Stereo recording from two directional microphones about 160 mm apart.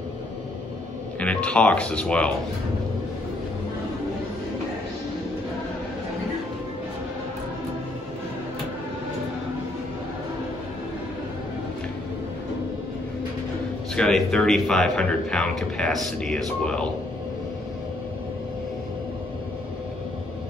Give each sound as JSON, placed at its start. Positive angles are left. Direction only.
{"t": 1.2, "sound": "speech", "side_deg": 10}
{"t": 13.9, "sound": "speech", "side_deg": 5}